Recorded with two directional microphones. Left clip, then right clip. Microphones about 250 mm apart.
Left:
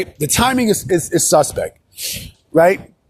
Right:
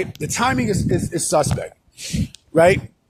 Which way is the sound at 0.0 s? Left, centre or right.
Left.